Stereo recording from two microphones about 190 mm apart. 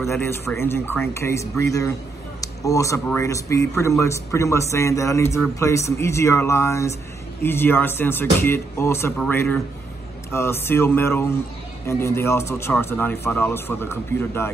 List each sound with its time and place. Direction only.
0.1 s a man's voice: 10° left (ahead or behind)